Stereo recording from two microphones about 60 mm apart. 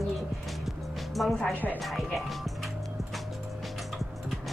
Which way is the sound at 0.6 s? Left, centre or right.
Centre.